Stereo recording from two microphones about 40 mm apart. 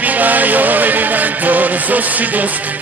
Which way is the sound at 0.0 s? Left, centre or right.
Right.